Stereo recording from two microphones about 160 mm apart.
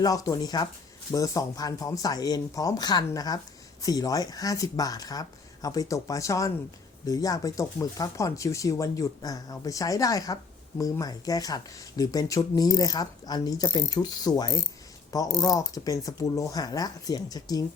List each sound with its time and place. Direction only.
0.0 s speech: 20° left (ahead or behind)